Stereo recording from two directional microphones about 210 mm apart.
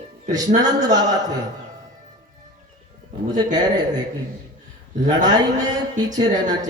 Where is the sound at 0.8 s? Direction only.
15° right (ahead or behind).